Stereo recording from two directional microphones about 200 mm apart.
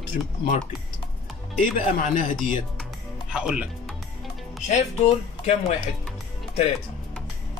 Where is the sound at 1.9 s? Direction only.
40° left (ahead or behind).